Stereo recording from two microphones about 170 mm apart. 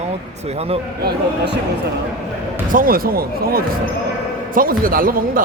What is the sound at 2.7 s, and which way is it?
A man's voice, 55° right (ahead or behind).